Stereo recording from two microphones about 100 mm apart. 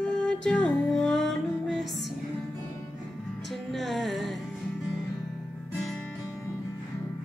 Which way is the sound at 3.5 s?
Centre (ahead or behind).